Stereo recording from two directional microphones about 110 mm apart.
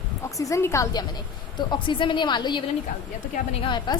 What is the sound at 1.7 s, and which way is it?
Speech, 45° left (ahead or behind).